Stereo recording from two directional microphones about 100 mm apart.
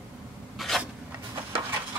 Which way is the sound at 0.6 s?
Centre (ahead or behind).